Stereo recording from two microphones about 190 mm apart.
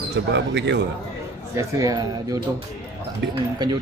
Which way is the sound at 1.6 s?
20° right (ahead or behind).